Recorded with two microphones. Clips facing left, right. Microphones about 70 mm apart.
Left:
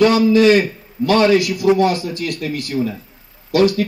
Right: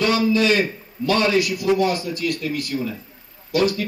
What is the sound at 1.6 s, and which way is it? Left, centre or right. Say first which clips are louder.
Speech: left 5 dB; left.